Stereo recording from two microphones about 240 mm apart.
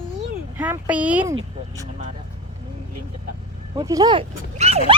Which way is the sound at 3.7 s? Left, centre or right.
Centre.